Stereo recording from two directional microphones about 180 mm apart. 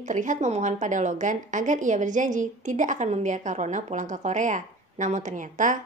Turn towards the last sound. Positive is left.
turn(degrees=-45)  # may be behind; listen again after turning